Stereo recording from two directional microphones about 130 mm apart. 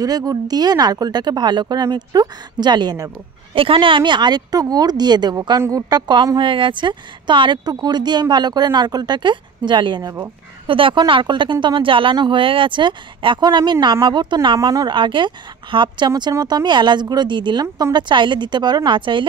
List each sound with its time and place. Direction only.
0.0 s a woman's voice: 30° right (ahead or behind)
3.5 s a woman's voice: 45° right (ahead or behind)